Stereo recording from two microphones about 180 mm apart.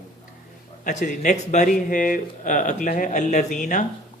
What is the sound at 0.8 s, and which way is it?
Speech, 45° left (ahead or behind).